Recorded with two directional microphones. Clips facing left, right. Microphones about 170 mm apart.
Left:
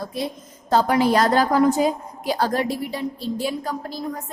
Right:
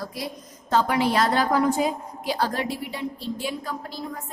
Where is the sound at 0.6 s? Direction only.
40° left (ahead or behind).